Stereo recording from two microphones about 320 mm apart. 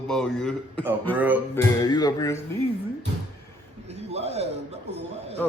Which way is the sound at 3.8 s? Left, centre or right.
Centre.